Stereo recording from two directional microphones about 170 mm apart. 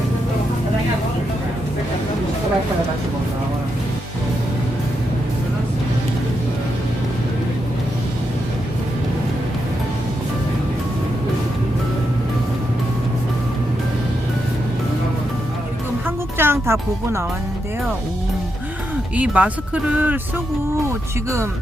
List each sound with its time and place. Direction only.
16.0 s music: 15° right (ahead or behind)
19.1 s speech: 10° right (ahead or behind)